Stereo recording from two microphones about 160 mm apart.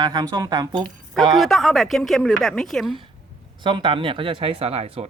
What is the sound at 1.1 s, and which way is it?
Speech, centre (ahead or behind).